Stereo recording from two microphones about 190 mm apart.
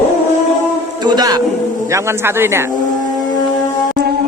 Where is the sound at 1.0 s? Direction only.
20° right (ahead or behind).